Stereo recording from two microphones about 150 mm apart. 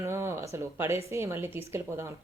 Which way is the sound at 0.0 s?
15° right (ahead or behind).